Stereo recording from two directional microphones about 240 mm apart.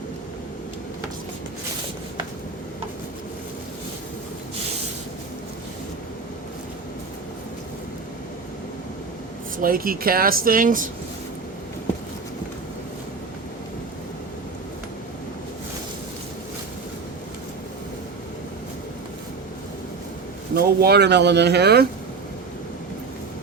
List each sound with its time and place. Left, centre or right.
9.6 s speech: right
20.6 s speech: right